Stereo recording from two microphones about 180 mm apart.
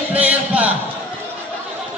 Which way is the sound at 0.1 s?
10° right (ahead or behind).